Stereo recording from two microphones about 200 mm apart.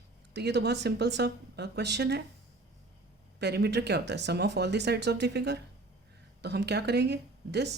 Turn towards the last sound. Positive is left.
turn(degrees=-55)  # may be behind; listen again after turning